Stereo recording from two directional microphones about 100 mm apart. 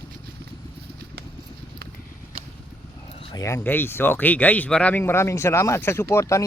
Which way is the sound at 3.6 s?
20° left (ahead or behind).